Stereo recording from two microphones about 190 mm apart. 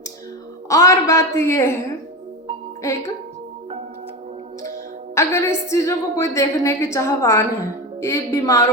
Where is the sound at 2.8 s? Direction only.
15° left (ahead or behind).